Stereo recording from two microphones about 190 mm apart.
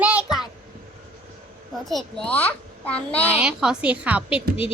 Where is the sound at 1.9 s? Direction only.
Centre (ahead or behind).